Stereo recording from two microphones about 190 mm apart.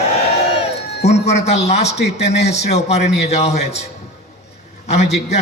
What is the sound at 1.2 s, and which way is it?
A man's voice, 35° left (ahead or behind).